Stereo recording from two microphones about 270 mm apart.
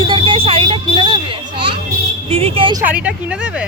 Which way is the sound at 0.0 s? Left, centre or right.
Centre.